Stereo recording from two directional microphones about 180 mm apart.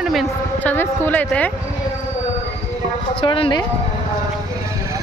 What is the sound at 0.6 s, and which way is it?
Speech, 10° left (ahead or behind).